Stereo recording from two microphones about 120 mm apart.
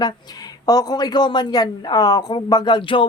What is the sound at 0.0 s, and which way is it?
Speech, 35° left (ahead or behind).